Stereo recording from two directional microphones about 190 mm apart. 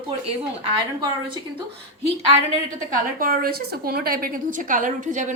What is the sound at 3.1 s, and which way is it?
A woman's voice, 50° right (ahead or behind).